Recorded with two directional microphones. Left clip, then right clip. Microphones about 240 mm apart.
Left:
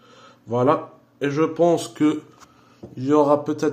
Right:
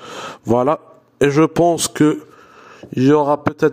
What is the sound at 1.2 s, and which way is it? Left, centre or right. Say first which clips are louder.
Speech: right 6 dB; right.